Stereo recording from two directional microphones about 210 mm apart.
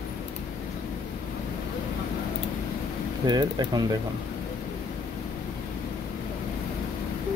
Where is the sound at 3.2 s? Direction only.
20° right (ahead or behind).